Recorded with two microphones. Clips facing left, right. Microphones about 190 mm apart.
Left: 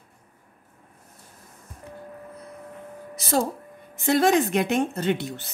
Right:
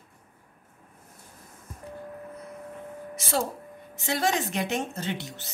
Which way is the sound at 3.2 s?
40° left (ahead or behind).